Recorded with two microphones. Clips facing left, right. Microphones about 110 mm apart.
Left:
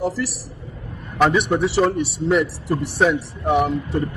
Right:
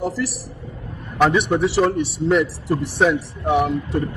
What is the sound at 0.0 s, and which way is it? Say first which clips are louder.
A man's voice: even; centre (ahead or behind).